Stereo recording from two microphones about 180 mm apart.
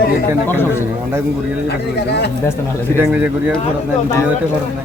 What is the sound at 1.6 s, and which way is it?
Speech, 70° left (ahead or behind).